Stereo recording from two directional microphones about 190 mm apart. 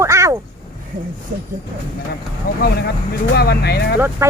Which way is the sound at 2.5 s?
50° left (ahead or behind).